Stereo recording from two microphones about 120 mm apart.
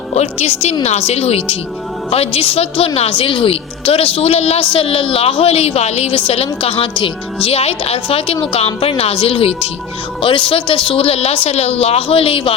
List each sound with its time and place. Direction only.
0.1 s a woman's voice: 65° left (ahead or behind)
10.2 s a woman's voice: 45° left (ahead or behind)